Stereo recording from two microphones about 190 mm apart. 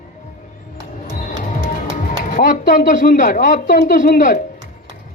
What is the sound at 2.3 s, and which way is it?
Speech, 45° left (ahead or behind).